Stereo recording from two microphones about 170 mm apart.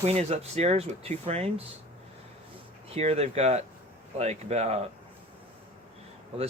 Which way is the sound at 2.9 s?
35° right (ahead or behind).